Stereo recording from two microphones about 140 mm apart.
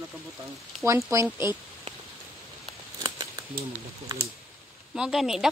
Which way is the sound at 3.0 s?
30° right (ahead or behind).